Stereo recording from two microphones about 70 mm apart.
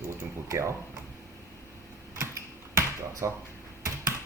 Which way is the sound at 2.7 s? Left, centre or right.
Right.